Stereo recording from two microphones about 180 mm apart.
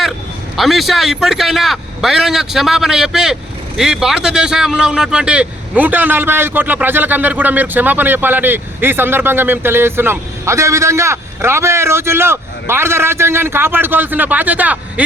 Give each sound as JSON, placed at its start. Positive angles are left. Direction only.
{"t": 0.5, "sound": "a man's voice", "side_deg": 0}